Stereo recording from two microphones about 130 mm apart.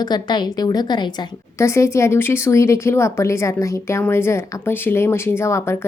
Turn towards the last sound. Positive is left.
turn(degrees=20)  # may be behind; listen again after turning